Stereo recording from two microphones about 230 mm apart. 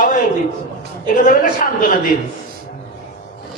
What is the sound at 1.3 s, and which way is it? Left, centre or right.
Speech, left.